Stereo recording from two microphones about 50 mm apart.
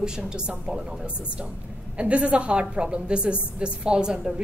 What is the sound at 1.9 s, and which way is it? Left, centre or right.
A woman's voice, right.